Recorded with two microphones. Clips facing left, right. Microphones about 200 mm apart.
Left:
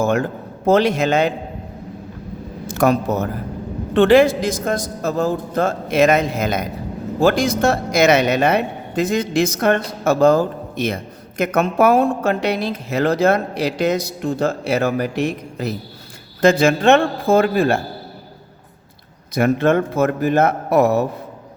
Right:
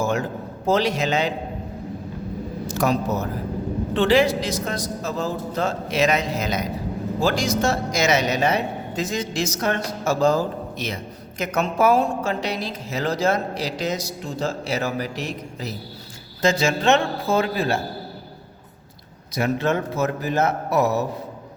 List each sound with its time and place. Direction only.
0.0 s a man's voice: 60° left (ahead or behind)
2.6 s a man's voice: 55° left (ahead or behind)
19.3 s a man's voice: 55° left (ahead or behind)